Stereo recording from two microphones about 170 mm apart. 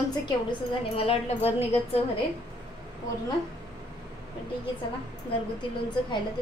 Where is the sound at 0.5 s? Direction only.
35° left (ahead or behind).